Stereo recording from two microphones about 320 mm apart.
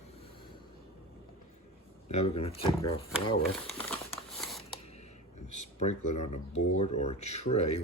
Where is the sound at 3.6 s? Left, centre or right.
Centre.